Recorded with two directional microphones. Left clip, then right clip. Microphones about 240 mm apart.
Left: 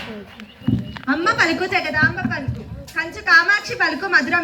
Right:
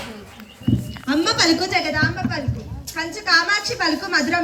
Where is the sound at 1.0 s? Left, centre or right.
Right.